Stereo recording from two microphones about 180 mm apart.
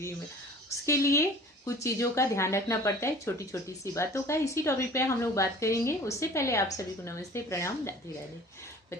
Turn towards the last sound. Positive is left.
turn(degrees=15)  # may be behind; listen again after turning